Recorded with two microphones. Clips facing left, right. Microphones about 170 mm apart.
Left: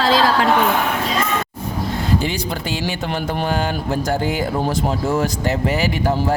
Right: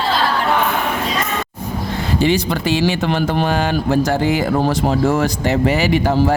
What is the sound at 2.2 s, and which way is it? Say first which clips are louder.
Speech: right 6 dB; 85° right.